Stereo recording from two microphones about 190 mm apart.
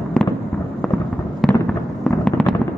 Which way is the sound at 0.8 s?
Centre (ahead or behind).